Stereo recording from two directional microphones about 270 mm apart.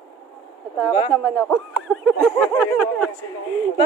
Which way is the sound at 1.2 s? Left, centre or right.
Centre.